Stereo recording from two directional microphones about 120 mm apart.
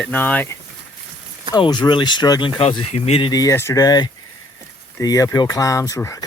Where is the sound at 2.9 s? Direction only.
55° left (ahead or behind).